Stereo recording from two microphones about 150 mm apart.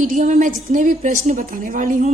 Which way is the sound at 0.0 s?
60° right (ahead or behind).